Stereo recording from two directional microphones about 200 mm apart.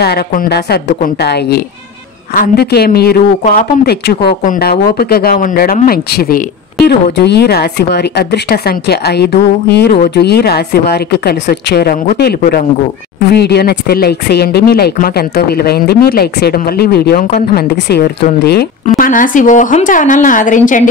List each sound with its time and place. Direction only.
0.0 s speech: 50° left (ahead or behind)
18.9 s a woman's voice: 40° left (ahead or behind)